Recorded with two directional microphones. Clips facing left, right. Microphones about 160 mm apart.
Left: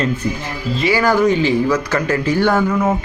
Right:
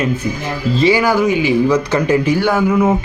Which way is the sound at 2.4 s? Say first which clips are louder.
Right 2 dB; 5° right (ahead or behind).